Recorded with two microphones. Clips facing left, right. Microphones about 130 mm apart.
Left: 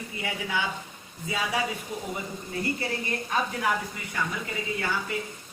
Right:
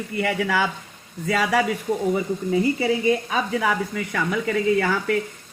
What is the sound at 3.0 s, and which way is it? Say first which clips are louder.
Speech: right 7 dB; 90° right.